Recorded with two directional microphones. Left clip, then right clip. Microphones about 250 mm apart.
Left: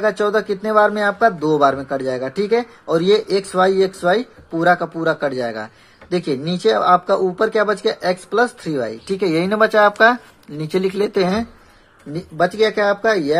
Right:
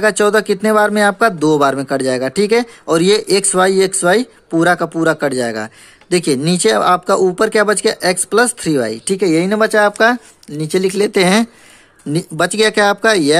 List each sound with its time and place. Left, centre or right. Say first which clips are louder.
0.0 s speech: right 5 dB; right